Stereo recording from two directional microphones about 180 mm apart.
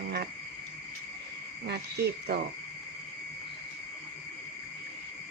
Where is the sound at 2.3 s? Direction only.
65° right (ahead or behind).